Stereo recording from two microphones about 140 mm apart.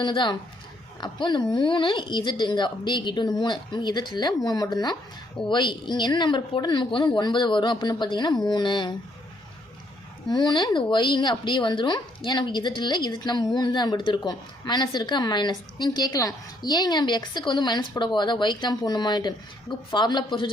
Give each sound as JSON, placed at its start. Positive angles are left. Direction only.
{"t": 0.0, "sound": "a woman's voice", "side_deg": 35}
{"t": 10.2, "sound": "a woman's voice", "side_deg": 30}